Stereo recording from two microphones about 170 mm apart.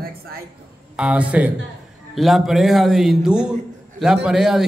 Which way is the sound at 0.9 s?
5° right (ahead or behind).